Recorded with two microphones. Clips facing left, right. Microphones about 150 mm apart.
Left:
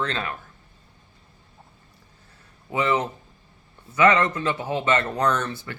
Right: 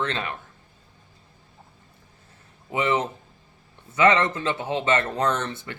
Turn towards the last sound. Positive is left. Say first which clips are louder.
# left 1 dB
turn(degrees=-25)  # may be behind; listen again after turning